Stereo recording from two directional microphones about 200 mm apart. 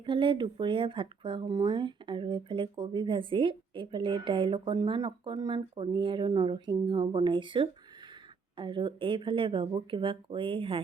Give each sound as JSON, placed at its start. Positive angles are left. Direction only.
{"t": 0.0, "sound": "speech", "side_deg": -25}